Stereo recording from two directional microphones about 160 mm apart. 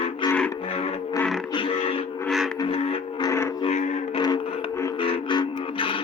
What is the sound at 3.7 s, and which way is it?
Music, 45° left (ahead or behind).